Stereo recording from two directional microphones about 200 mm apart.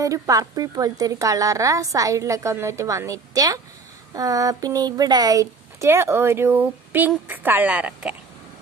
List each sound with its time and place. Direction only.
0.0 s a woman's voice: 15° right (ahead or behind)